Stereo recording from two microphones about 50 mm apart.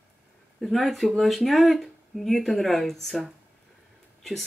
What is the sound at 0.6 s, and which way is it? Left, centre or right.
Speech, centre.